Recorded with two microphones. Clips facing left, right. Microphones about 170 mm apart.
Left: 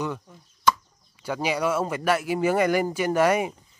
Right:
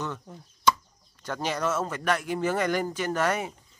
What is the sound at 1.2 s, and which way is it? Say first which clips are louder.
Speech: left 4 dB; 10° left (ahead or behind).